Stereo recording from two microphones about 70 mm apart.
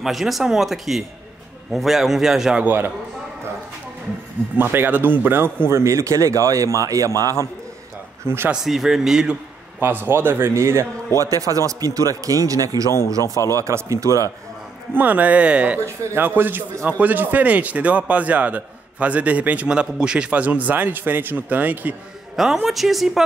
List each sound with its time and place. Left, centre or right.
0.0 s speech: centre
2.6 s a man's voice: right
4.6 s a man's voice: right
5.7 s speech: right
8.3 s a man's voice: right
8.6 s speech: centre
9.8 s a man's voice: right
11.1 s speech: right
13.2 s a man's voice: left
13.6 s speech: right
15.0 s a man's voice: right
16.2 s a man's voice: right
22.3 s a woman's voice: centre